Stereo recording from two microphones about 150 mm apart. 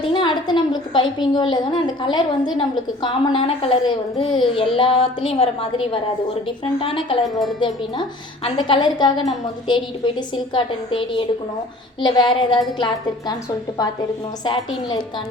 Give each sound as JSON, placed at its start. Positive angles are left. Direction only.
{"t": 0.0, "sound": "a woman's voice", "side_deg": 35}